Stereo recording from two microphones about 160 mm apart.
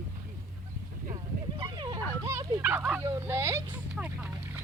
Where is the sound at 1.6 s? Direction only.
25° right (ahead or behind).